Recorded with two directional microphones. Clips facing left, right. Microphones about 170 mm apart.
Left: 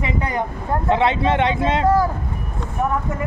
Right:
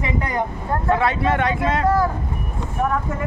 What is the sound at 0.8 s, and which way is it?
Speech, 25° left (ahead or behind).